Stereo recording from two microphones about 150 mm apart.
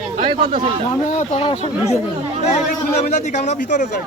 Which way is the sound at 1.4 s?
40° left (ahead or behind).